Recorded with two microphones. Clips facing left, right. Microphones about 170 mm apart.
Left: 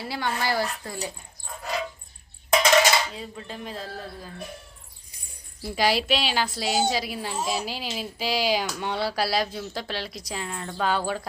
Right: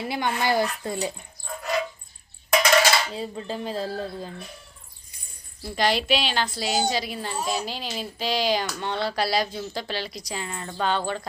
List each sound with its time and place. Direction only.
0.0 s speech: 20° right (ahead or behind)
2.5 s music: 20° left (ahead or behind)
3.2 s speech: 30° right (ahead or behind)
5.7 s speech: 5° left (ahead or behind)